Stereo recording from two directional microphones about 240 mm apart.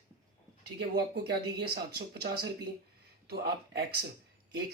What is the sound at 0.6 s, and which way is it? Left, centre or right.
Speech, right.